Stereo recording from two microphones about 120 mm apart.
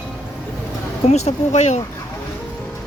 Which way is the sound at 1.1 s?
65° left (ahead or behind).